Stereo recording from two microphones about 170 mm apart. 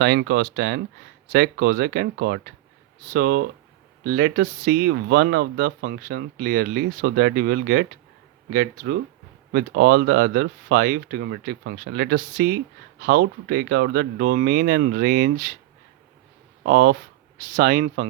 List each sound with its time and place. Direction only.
0.0 s speech: 85° right
1.3 s speech: 60° right (ahead or behind)
16.6 s speech: 60° right (ahead or behind)